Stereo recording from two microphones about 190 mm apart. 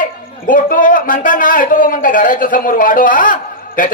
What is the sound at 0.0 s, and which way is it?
A man's voice, 45° left (ahead or behind).